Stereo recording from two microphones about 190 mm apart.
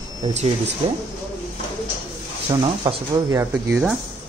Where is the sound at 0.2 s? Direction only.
35° right (ahead or behind).